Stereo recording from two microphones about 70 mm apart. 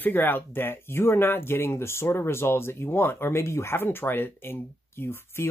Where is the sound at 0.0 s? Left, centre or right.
Left.